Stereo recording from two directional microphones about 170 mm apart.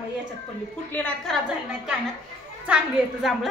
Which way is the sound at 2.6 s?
5° right (ahead or behind).